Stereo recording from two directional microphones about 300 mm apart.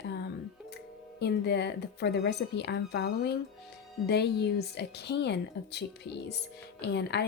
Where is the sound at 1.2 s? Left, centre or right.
Left.